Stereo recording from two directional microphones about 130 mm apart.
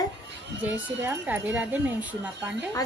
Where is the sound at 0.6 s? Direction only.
15° right (ahead or behind).